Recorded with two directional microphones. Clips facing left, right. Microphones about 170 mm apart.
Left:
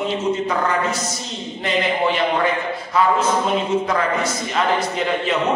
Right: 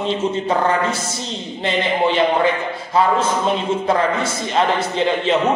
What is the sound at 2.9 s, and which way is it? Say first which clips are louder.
A man's voice: right 1 dB; 30° right (ahead or behind).